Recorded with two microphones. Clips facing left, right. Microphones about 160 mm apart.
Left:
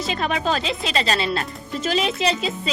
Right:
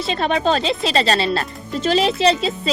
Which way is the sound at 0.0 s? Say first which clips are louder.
Right 4 dB; 30° right (ahead or behind).